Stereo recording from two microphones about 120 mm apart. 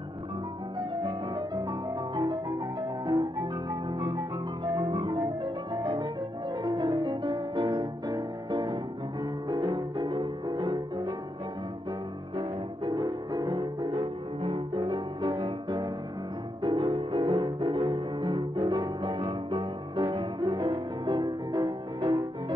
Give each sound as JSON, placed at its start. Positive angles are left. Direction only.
{"t": 0.7, "sound": "music", "side_deg": -45}
{"t": 9.8, "sound": "music", "side_deg": -40}
{"t": 12.4, "sound": "music", "side_deg": -40}
{"t": 13.9, "sound": "music", "side_deg": -45}
{"t": 19.0, "sound": "music", "side_deg": -50}